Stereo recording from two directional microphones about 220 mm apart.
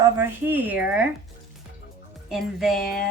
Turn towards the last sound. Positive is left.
turn(degrees=0)  # may be behind; listen again after turning